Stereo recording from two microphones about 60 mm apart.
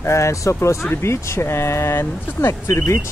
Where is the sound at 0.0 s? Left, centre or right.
Left.